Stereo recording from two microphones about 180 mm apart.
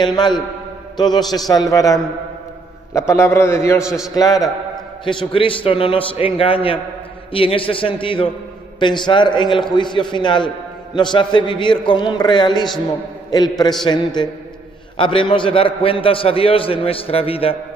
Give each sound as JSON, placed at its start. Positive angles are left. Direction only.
{"t": 0.0, "sound": "a man's voice", "side_deg": 25}
{"t": 3.8, "sound": "a man's voice", "side_deg": -5}
{"t": 4.1, "sound": "a man's voice", "side_deg": 20}